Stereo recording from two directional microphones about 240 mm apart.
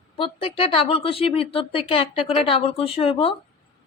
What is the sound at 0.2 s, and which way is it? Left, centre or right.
Speech, left.